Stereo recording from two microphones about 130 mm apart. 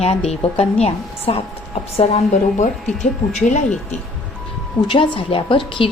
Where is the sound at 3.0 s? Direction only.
70° left (ahead or behind).